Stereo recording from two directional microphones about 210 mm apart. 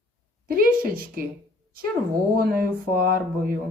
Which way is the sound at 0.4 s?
45° right (ahead or behind).